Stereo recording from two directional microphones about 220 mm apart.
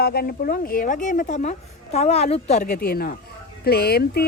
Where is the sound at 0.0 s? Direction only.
45° left (ahead or behind).